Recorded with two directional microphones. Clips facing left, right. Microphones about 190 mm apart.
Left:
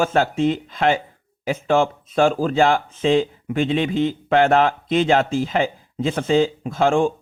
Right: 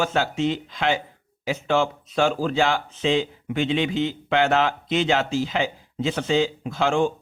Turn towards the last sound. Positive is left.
turn(degrees=50)  # may be behind; listen again after turning